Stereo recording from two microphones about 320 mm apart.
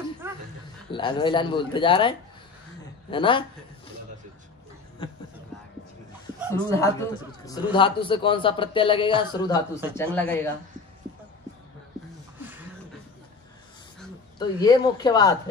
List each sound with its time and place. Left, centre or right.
0.2 s chuckle: centre
0.9 s speech: centre
6.5 s speech: centre
12.4 s a sound: centre
14.4 s speech: centre